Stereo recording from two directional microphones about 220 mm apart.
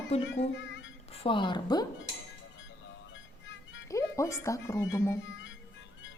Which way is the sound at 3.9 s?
15° left (ahead or behind).